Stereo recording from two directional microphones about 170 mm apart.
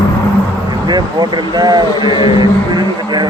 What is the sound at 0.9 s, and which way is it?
Speech, 25° right (ahead or behind).